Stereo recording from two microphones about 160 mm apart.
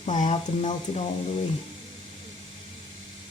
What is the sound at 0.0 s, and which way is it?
Speech, 45° left (ahead or behind).